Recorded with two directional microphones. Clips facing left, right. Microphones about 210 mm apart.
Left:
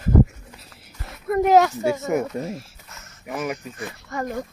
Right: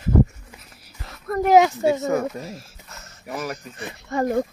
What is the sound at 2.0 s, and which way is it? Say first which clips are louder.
Speech: even; 20° left (ahead or behind).